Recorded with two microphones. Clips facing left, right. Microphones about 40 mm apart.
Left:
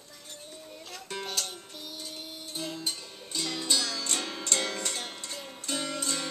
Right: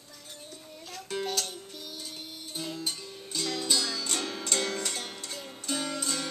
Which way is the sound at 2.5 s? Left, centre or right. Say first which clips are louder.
Even; centre.